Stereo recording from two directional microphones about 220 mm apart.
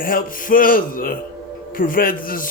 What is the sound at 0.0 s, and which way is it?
Speech, 40° left (ahead or behind).